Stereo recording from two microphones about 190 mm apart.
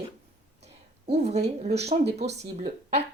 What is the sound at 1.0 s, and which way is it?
Speech, 35° right (ahead or behind).